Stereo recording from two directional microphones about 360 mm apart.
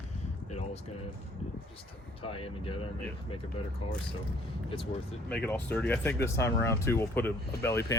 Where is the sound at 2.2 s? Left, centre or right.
Centre.